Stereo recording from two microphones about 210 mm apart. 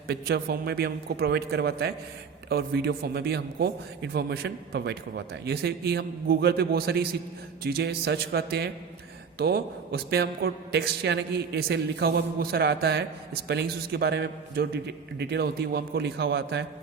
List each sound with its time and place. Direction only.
0.1 s a man's voice: 50° right (ahead or behind)